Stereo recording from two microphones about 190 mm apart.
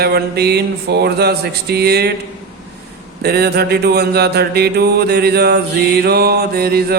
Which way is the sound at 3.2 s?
55° right (ahead or behind).